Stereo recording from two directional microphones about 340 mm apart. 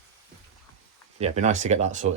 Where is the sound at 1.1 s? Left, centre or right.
Centre.